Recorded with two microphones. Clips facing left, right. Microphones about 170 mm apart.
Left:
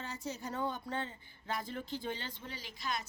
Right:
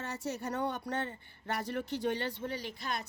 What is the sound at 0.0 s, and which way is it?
Speech, 70° right (ahead or behind).